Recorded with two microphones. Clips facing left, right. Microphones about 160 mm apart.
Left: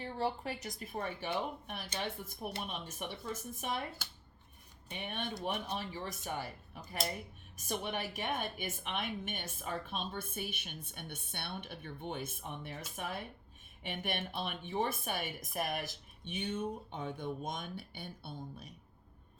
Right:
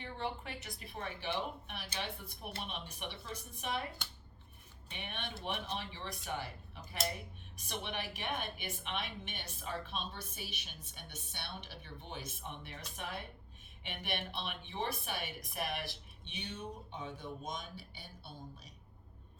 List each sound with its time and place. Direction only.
0.0 s a woman's voice: 35° left (ahead or behind)
4.9 s a woman's voice: 45° left (ahead or behind)
7.5 s a woman's voice: 45° left (ahead or behind)